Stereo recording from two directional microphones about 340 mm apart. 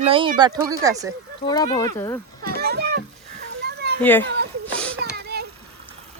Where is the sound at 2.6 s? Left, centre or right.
Right.